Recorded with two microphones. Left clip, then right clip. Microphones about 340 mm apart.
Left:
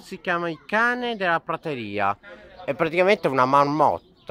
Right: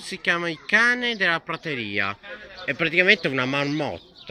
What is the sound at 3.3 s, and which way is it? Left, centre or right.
Speech, centre.